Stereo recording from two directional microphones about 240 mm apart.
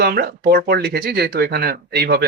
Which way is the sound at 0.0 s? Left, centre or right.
Right.